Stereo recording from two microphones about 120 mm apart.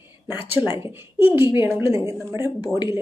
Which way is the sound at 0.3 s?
15° right (ahead or behind).